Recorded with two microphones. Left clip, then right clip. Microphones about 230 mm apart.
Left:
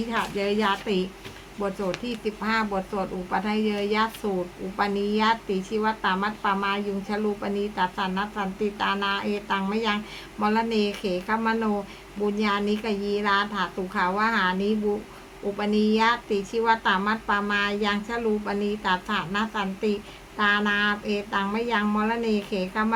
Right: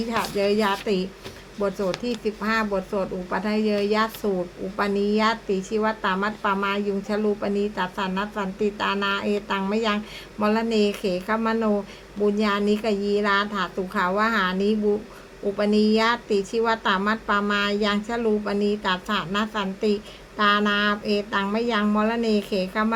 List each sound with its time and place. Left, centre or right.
0.1 s a woman's voice: centre